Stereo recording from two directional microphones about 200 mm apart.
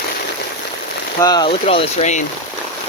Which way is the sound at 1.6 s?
30° left (ahead or behind).